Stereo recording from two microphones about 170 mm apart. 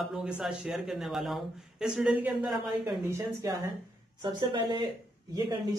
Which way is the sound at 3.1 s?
20° right (ahead or behind).